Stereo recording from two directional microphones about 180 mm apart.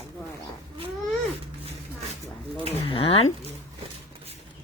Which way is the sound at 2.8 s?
30° left (ahead or behind).